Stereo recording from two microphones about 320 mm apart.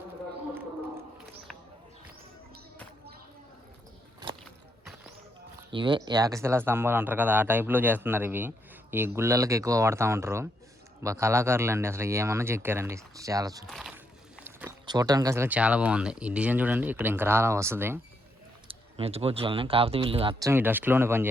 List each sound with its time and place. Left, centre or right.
5.7 s speech: centre
13.7 s boat: centre
14.4 s speech: centre
18.7 s speech: centre